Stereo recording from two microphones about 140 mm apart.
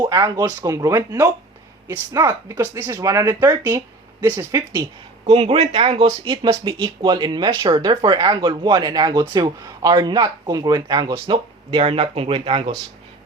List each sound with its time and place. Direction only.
0.0 s speech: 25° right (ahead or behind)
5.2 s speech: 45° right (ahead or behind)